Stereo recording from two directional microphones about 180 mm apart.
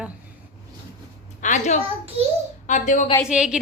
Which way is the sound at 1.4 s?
40° left (ahead or behind).